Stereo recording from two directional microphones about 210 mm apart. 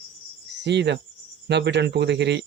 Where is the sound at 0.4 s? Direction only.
55° right (ahead or behind).